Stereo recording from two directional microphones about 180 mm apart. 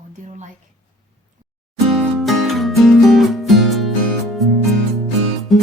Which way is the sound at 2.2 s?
Centre (ahead or behind).